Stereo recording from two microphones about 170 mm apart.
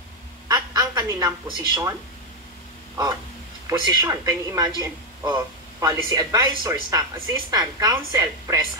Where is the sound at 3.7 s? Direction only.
20° right (ahead or behind).